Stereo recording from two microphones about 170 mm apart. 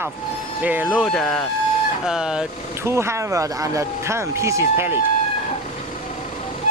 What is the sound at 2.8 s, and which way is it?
Speech, 15° right (ahead or behind).